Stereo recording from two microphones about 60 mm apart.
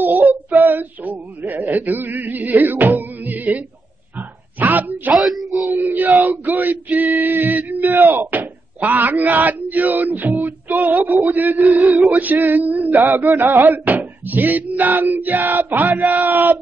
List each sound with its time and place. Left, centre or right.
0.0 s female singing: right
3.0 s music: right
4.2 s a sound: right
5.1 s speech: centre
5.7 s male singing: right
13.2 s a sound: right